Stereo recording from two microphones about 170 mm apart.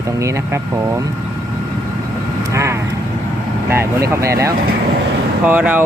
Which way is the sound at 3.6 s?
15° right (ahead or behind).